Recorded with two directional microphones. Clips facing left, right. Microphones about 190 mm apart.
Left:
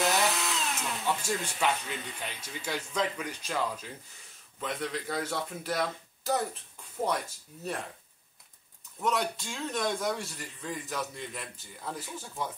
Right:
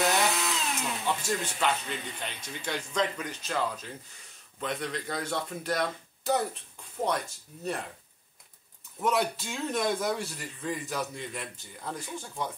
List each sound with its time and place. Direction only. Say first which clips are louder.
0.0 s a man's voice: right 1 dB; centre (ahead or behind)
9.0 s a man's voice: right 2 dB; 5° right (ahead or behind)